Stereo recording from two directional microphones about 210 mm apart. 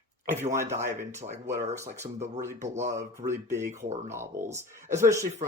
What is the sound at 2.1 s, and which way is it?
Speech, 35° right (ahead or behind).